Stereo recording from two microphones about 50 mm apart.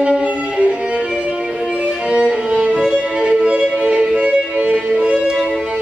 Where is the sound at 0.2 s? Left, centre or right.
Right.